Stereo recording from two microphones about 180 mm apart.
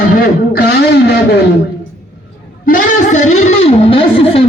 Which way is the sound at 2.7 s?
45° left (ahead or behind).